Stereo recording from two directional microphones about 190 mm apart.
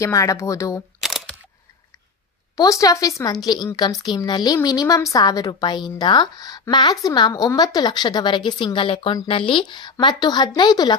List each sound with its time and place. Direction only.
0.0 s speech: 15° left (ahead or behind)
1.0 s single-lens reflex camera: centre (ahead or behind)
2.5 s a woman's voice: 20° left (ahead or behind)